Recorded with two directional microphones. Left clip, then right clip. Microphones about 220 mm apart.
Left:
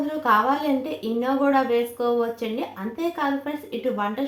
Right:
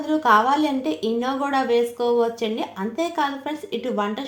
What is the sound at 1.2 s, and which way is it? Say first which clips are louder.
Speech: left 5 dB; 45° right (ahead or behind).